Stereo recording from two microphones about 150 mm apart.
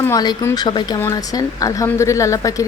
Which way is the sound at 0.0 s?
25° left (ahead or behind).